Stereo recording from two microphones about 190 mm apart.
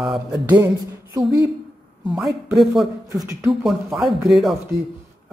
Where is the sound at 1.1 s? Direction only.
20° right (ahead or behind).